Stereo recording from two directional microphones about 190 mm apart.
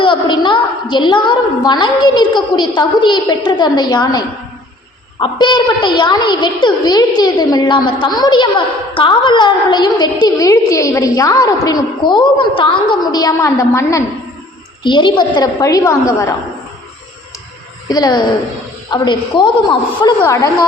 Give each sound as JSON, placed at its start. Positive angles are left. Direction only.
{"t": 0.0, "sound": "a woman's voice", "side_deg": 25}
{"t": 17.8, "sound": "a woman's voice", "side_deg": 20}